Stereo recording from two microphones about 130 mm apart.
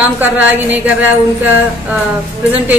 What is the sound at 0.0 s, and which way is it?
Speech, 15° right (ahead or behind).